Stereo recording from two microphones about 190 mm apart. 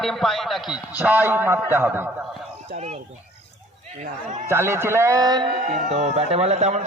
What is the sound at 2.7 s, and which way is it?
Speech, 35° right (ahead or behind).